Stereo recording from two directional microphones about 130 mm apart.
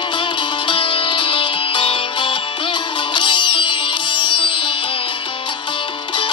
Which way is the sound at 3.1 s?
40° left (ahead or behind).